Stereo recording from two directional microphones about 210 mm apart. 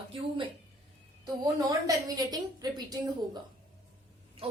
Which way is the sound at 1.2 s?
20° right (ahead or behind).